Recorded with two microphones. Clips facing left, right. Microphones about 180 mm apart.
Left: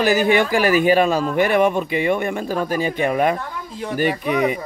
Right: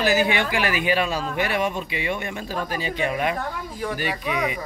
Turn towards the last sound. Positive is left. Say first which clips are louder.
# left 7 dB
turn(degrees=50)  # may be behind; listen again after turning